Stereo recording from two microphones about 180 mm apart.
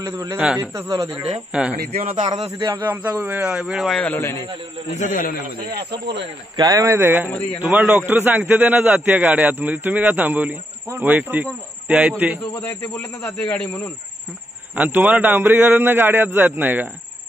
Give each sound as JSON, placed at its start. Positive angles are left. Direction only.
{"t": 0.0, "sound": "a man's voice", "side_deg": -15}
{"t": 1.9, "sound": "speech", "side_deg": -40}
{"t": 2.6, "sound": "a man's voice", "side_deg": -10}
{"t": 4.9, "sound": "a man's voice", "side_deg": 45}
{"t": 5.7, "sound": "speech", "side_deg": -65}
{"t": 6.5, "sound": "a man's voice", "side_deg": -20}
{"t": 12.5, "sound": "speech", "side_deg": 10}
{"t": 14.8, "sound": "a man's voice", "side_deg": -10}